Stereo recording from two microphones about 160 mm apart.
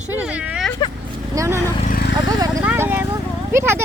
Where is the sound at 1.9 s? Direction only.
70° left (ahead or behind).